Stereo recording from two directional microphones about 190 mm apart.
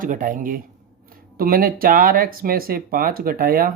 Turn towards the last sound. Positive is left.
turn(degrees=-50)  # may be behind; listen again after turning